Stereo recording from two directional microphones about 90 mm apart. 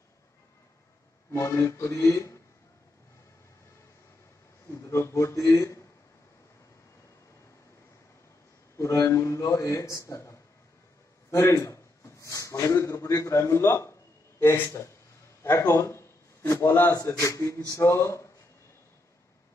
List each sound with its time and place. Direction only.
1.3 s a man's voice: 30° left (ahead or behind)
4.6 s a man's voice: 35° left (ahead or behind)
8.7 s a man's voice: 35° left (ahead or behind)
15.4 s a sound: 25° left (ahead or behind)
16.9 s a man's voice: 35° left (ahead or behind)